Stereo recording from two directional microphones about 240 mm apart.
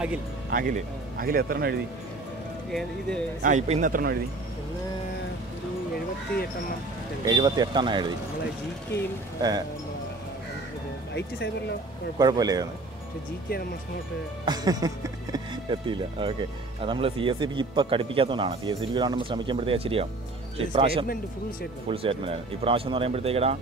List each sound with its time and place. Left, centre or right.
0.5 s speech: right
2.7 s speech: centre
3.4 s speech: right
7.2 s speech: centre
11.1 s speech: left
12.2 s speech: centre
14.4 s speech: centre